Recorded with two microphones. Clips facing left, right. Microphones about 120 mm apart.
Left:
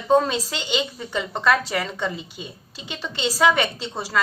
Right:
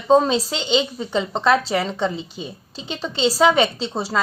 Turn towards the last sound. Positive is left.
turn(degrees=-30)  # may be behind; listen again after turning